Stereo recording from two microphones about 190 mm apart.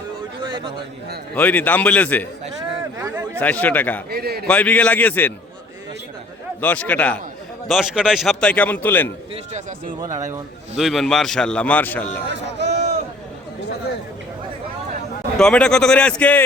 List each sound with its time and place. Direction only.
1.4 s a man's voice: 10° left (ahead or behind)
3.0 s a sound: 15° right (ahead or behind)
3.3 s a man's voice: 10° left (ahead or behind)
4.1 s a man's voice: 55° right (ahead or behind)
4.4 s a man's voice: 5° left (ahead or behind)
6.6 s a man's voice: 5° left (ahead or behind)
7.7 s a man's voice: 5° right (ahead or behind)
9.3 s speech: 40° right (ahead or behind)
10.0 s speech: 15° right (ahead or behind)
10.8 s a man's voice: centre (ahead or behind)
12.3 s a sound: 65° right (ahead or behind)
15.4 s a man's voice: 5° left (ahead or behind)